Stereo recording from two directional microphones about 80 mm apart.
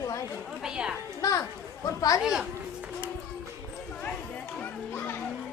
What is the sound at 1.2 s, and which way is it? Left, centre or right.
Speech, left.